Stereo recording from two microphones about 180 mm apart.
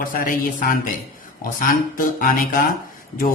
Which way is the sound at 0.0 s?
50° left (ahead or behind).